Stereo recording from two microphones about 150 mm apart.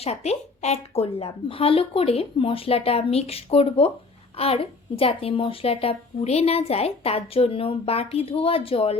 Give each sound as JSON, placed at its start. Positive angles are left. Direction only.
{"t": 0.0, "sound": "a woman's voice", "side_deg": 45}